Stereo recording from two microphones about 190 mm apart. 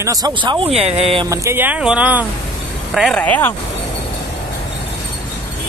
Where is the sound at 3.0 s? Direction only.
5° left (ahead or behind).